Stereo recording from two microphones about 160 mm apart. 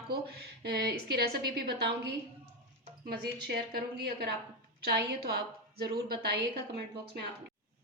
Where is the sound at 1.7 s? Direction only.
90° right.